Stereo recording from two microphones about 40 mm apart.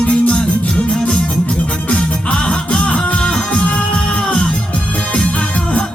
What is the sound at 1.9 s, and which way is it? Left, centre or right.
Music, left.